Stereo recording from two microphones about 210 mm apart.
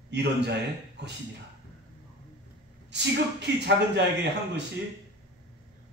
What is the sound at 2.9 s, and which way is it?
A man's voice, 55° right (ahead or behind).